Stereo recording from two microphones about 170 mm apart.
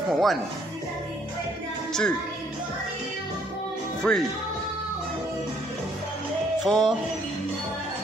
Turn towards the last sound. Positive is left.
turn(degrees=0)  # may be behind; listen again after turning